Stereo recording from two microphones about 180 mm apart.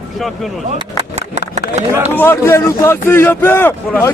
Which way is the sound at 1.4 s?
40° right (ahead or behind).